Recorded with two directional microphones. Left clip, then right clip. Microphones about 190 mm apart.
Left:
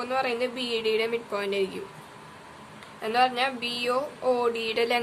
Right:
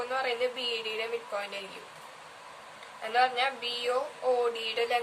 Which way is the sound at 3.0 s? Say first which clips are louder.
Left 3 dB; 45° left (ahead or behind).